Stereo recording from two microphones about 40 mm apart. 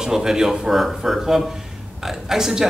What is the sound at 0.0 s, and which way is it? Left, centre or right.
Speech, centre.